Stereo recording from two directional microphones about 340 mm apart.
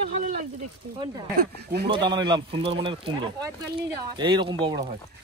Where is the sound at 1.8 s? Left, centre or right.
Centre.